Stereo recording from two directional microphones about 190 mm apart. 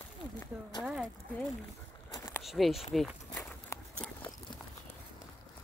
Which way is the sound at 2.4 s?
Centre (ahead or behind).